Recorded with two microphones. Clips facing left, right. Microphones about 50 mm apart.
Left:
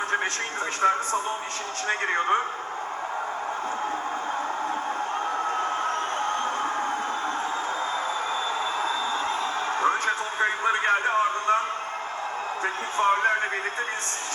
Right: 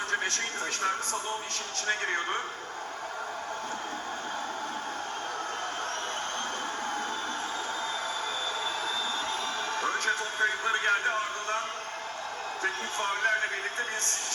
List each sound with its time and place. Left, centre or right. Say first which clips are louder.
0.8 s speech: left 10 dB; left
9.8 s a man's voice: left 5 dB; left
12.6 s speech: left 8 dB; left